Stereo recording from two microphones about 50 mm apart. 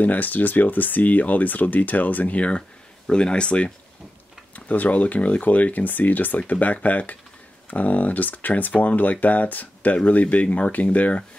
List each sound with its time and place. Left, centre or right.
0.0 s speech: left